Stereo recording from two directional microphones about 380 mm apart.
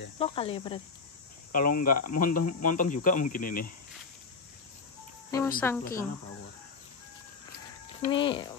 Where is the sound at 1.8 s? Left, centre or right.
Left.